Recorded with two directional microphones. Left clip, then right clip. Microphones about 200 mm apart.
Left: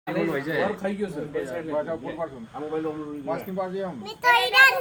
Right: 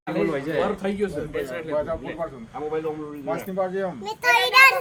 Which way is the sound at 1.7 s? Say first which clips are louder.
Right 2 dB; 35° right (ahead or behind).